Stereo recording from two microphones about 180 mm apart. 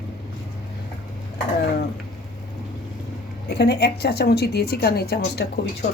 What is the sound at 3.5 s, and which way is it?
A woman's voice, 65° left (ahead or behind).